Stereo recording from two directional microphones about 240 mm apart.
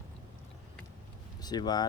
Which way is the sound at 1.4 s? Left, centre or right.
Centre.